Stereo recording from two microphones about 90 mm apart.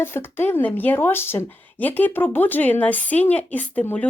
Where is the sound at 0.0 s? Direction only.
25° left (ahead or behind).